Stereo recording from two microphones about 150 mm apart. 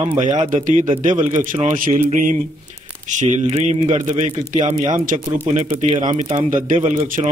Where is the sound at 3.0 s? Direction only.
55° right (ahead or behind).